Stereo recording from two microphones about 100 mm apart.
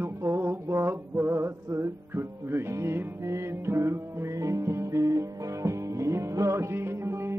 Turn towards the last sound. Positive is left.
turn(degrees=-25)  # may be behind; listen again after turning